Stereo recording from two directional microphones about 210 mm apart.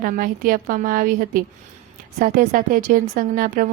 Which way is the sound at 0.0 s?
40° right (ahead or behind).